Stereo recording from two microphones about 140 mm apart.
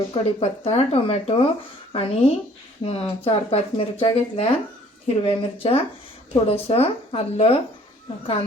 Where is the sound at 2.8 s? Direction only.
45° left (ahead or behind).